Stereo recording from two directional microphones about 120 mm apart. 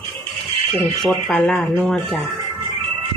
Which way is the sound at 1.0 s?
5° left (ahead or behind).